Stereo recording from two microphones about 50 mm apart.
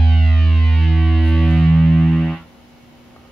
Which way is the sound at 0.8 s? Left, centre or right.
Centre.